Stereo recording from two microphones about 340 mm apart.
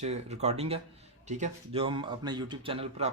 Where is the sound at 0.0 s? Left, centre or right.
Centre.